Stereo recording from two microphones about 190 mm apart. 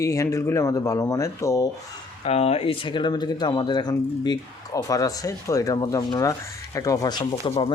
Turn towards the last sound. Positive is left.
turn(degrees=25)  # may be behind; listen again after turning